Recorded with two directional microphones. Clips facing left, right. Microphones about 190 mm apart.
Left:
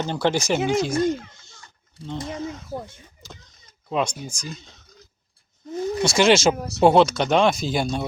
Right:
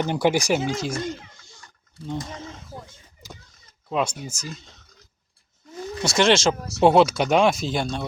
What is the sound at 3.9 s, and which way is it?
Speech, 5° right (ahead or behind).